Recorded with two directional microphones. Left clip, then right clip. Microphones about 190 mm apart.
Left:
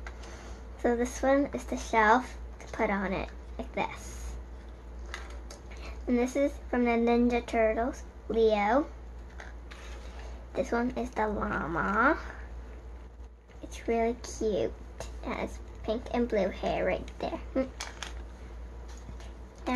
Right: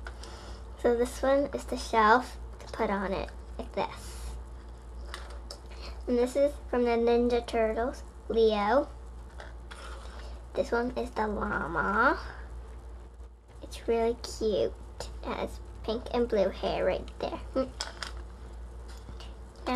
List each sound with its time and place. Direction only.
0.8 s speech: 15° left (ahead or behind)
5.8 s a woman's voice: 20° left (ahead or behind)
10.5 s speech: 25° left (ahead or behind)
13.7 s a woman's voice: 20° left (ahead or behind)